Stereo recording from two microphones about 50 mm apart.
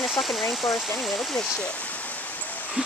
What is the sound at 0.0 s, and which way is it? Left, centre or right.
Speech, centre.